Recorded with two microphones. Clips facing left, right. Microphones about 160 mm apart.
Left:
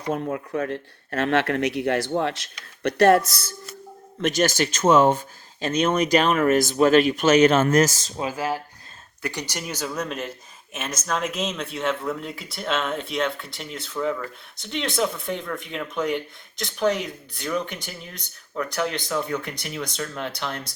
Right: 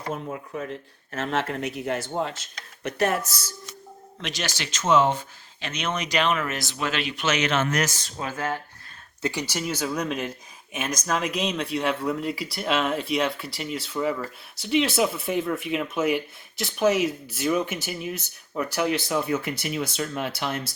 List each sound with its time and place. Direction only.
0.1 s speech: 85° left
4.2 s speech: 50° left (ahead or behind)
8.2 s speech: 10° left (ahead or behind)
9.5 s speech: 5° right (ahead or behind)
10.9 s speech: centre (ahead or behind)